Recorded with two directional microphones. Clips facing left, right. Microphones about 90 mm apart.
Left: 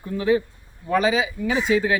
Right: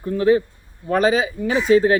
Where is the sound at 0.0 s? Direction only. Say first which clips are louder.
Right 4 dB; 40° right (ahead or behind).